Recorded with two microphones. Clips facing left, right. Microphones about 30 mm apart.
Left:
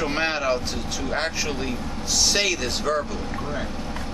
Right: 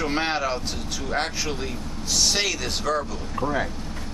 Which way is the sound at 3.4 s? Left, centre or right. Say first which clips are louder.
Right 8 dB; right.